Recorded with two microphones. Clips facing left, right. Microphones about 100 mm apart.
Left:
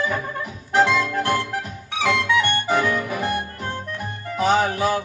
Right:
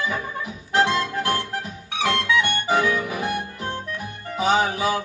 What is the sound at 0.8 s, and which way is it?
Music, 55° left (ahead or behind).